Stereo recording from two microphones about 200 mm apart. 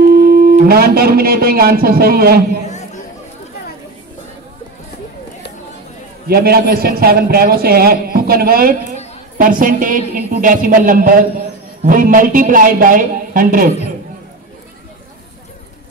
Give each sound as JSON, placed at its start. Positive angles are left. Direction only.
{"t": 0.4, "sound": "a man's voice", "side_deg": -50}
{"t": 2.6, "sound": "chatter", "side_deg": 35}
{"t": 6.2, "sound": "a man's voice", "side_deg": -50}